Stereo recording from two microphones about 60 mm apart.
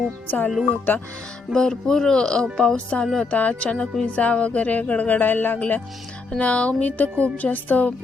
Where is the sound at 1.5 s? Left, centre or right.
Centre.